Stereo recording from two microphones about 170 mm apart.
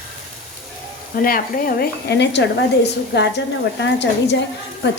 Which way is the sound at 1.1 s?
60° left (ahead or behind).